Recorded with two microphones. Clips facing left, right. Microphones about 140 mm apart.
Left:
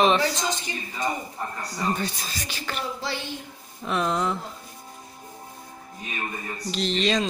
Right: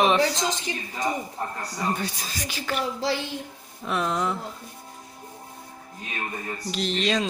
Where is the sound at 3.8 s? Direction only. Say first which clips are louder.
Left 1 dB; 5° right (ahead or behind).